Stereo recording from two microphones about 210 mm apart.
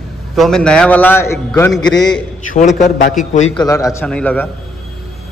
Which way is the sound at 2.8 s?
40° left (ahead or behind).